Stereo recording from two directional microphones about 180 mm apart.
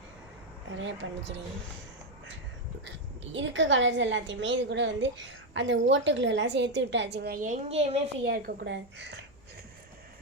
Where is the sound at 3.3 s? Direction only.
90° right; by 7.9 s 35° right (ahead or behind).